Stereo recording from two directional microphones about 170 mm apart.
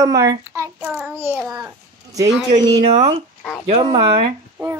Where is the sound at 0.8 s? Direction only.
5° right (ahead or behind).